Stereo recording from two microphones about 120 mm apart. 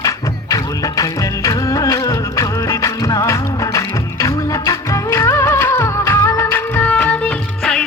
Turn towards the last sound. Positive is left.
turn(degrees=5)  # may be behind; listen again after turning